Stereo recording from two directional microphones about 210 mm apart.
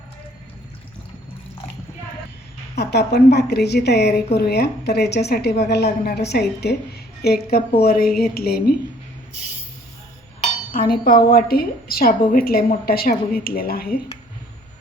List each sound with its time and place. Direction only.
2.7 s a woman's voice: 50° left (ahead or behind)
10.4 s chink: 40° left (ahead or behind)
11.0 s a woman's voice: 45° left (ahead or behind)